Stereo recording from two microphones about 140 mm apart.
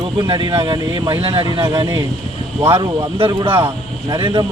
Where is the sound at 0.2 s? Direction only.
30° right (ahead or behind).